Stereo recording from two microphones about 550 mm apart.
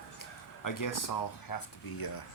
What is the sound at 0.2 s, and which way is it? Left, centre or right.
Speech, left.